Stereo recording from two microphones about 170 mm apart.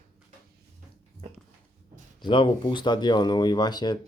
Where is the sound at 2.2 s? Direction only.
30° left (ahead or behind).